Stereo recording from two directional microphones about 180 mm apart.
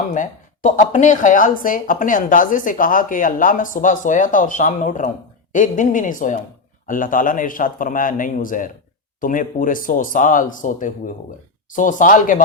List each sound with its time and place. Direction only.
0.1 s speech: 45° left (ahead or behind)